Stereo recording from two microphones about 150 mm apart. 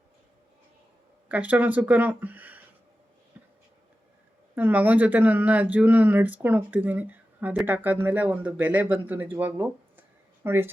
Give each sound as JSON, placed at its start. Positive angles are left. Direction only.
{"t": 1.3, "sound": "speech", "side_deg": -10}
{"t": 3.3, "sound": "writing", "side_deg": -10}
{"t": 4.5, "sound": "speech", "side_deg": -10}